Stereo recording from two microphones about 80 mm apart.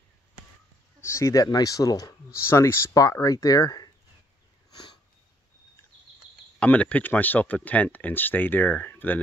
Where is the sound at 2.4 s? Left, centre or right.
Left.